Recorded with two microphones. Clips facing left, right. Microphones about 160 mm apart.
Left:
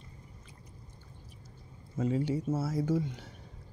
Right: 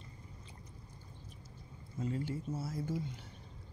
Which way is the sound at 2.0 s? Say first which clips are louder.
Left 8 dB; 90° left.